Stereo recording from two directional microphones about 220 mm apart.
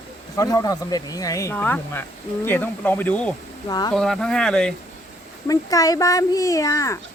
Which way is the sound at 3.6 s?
20° left (ahead or behind).